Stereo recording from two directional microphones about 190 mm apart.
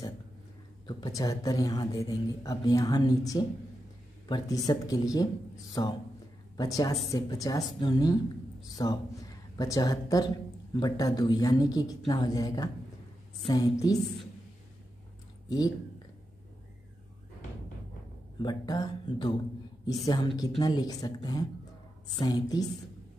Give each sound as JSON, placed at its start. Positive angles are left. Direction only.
{"t": 0.8, "sound": "a woman's voice", "side_deg": 20}
{"t": 18.4, "sound": "speech", "side_deg": 20}